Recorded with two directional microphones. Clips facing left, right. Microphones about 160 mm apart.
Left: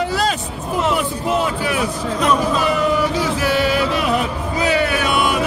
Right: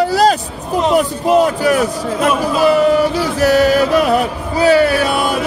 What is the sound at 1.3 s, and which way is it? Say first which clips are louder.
Speech: right 9 dB; 40° right (ahead or behind).